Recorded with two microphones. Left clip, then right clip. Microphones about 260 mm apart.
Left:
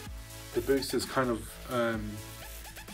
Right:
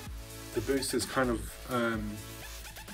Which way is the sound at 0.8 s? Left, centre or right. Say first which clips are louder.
Even; left.